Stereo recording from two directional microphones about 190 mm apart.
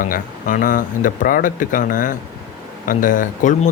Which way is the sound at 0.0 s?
45° left (ahead or behind).